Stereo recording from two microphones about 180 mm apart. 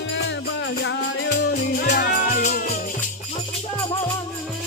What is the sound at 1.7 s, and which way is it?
Music, 65° left (ahead or behind).